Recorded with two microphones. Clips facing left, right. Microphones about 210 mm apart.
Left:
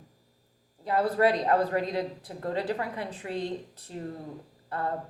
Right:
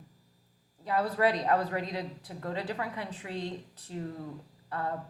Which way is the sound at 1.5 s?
40° left (ahead or behind).